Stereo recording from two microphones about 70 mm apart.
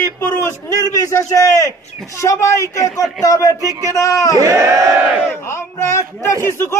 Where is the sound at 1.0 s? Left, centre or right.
Left.